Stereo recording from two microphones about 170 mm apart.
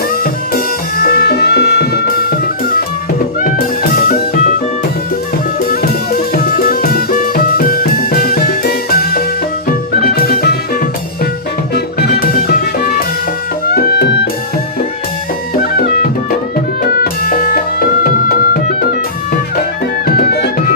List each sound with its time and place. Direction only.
0.1 s music: 55° left (ahead or behind)
5.5 s music: 60° left (ahead or behind)
15.5 s music: 65° left (ahead or behind)
20.1 s music: 70° left (ahead or behind)